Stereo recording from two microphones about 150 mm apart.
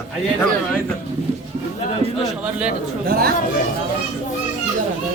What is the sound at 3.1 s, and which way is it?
Speech, 90° right.